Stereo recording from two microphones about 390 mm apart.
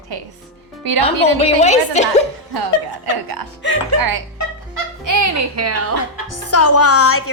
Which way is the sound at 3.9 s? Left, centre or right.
Right.